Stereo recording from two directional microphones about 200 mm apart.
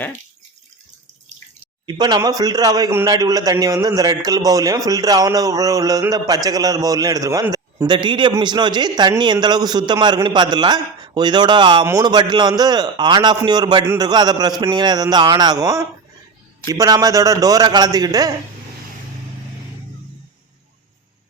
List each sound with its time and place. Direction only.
1.9 s a man's voice: 20° right (ahead or behind)